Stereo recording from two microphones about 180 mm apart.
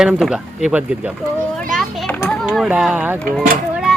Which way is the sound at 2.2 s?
5° left (ahead or behind).